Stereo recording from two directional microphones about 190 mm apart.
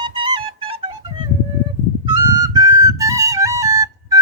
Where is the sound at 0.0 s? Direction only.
25° right (ahead or behind).